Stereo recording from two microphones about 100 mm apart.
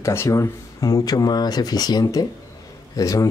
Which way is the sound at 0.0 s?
25° left (ahead or behind).